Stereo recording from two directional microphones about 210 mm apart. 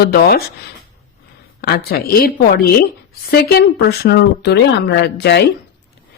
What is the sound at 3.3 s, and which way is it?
Speech, 50° left (ahead or behind).